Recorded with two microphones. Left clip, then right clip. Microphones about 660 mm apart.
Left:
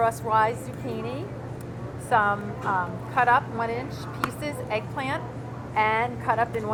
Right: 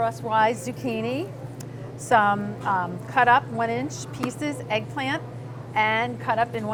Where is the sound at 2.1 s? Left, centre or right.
Right.